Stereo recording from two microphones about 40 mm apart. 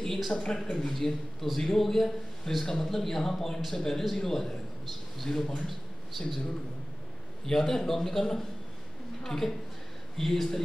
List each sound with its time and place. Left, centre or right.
0.3 s speech: left
0.6 s a man's voice: centre
7.4 s a man's voice: centre